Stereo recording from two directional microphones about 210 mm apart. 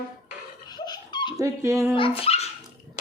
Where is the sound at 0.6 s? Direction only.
20° left (ahead or behind).